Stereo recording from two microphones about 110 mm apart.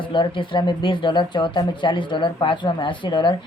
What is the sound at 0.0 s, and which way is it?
Speech, 45° left (ahead or behind).